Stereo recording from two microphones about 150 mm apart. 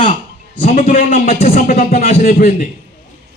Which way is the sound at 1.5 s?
65° left (ahead or behind).